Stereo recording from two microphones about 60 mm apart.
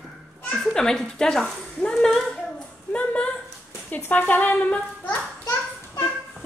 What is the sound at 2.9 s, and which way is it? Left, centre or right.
A child's voice, left.